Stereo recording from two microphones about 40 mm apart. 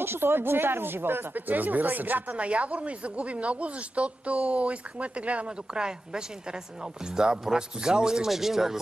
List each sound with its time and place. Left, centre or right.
0.0 s speech: right
1.3 s speech: right
2.4 s speech: right
5.7 s speech: right
7.4 s speech: centre